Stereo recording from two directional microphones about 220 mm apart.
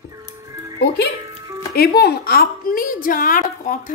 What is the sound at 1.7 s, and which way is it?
A woman's voice, 45° left (ahead or behind).